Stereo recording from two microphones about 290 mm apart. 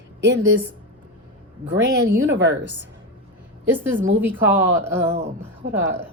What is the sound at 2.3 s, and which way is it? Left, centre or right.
Speech, right.